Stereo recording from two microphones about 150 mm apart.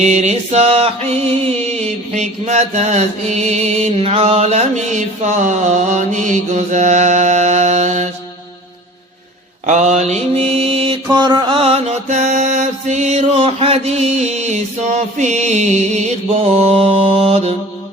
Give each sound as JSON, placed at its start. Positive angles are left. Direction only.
{"t": 0.0, "sound": "mantra", "side_deg": -50}
{"t": 9.6, "sound": "mantra", "side_deg": -50}